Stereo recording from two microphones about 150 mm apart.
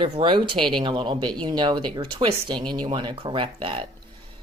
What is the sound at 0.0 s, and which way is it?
A woman's voice, 35° right (ahead or behind).